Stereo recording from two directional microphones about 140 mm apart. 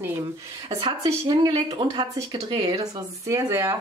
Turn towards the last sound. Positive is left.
turn(degrees=-20)  # may be behind; listen again after turning